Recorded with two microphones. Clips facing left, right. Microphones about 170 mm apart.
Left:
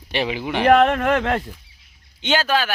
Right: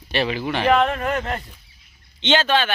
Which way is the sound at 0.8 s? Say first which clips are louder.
Left 4 dB; 80° left.